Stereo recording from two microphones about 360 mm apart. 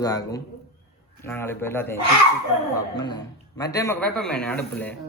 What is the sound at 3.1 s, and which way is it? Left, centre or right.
A man's voice, centre.